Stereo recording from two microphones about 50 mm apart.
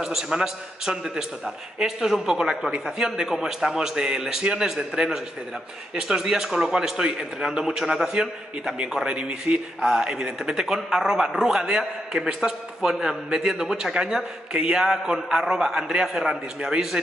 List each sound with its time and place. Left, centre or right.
0.0 s speech: centre